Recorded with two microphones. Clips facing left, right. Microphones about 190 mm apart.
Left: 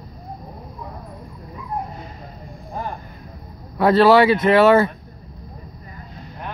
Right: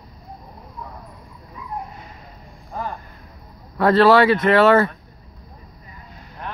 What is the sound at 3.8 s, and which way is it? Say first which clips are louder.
Speech: left 1 dB; 10° left (ahead or behind).